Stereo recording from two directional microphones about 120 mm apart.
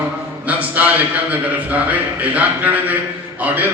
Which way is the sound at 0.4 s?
15° right (ahead or behind).